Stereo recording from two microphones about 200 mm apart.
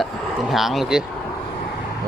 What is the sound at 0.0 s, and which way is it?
Speech, centre (ahead or behind).